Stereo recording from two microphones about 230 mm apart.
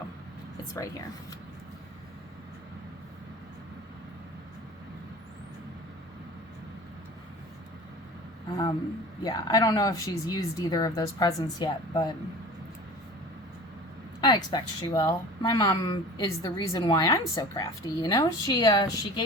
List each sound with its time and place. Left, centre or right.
9.2 s speech: centre
14.2 s speech: centre